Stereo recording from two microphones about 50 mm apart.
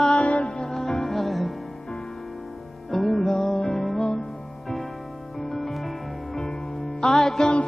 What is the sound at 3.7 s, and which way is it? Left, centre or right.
Music, centre.